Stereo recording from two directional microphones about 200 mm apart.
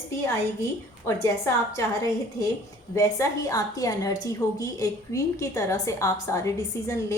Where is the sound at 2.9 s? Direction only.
15° left (ahead or behind).